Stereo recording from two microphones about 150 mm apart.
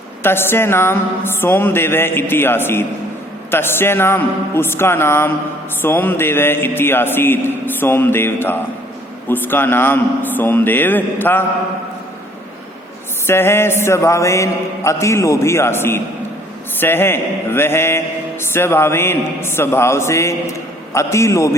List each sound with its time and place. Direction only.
0.2 s mantra: 15° left (ahead or behind)
13.2 s mantra: 15° left (ahead or behind)